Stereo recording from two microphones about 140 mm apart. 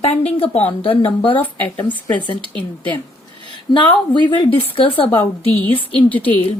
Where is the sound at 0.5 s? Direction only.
45° left (ahead or behind).